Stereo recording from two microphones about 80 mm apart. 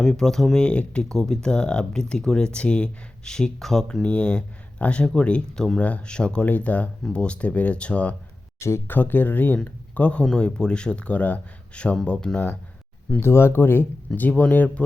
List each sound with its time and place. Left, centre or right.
0.0 s speech: centre
8.5 s speech: left
9.0 s speech: left
13.1 s speech: left